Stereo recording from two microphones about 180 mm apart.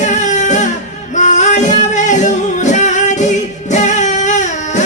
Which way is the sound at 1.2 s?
40° left (ahead or behind).